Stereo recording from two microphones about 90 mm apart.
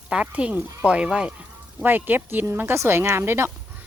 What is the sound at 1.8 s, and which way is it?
Speech, 20° right (ahead or behind).